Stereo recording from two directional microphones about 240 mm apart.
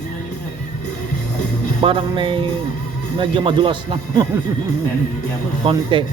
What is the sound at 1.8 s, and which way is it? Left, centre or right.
Speech, right.